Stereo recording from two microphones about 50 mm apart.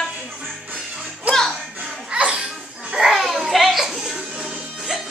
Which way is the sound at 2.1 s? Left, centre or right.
Right.